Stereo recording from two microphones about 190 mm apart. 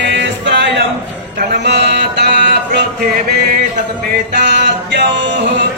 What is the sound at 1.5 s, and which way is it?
Music, 65° right (ahead or behind).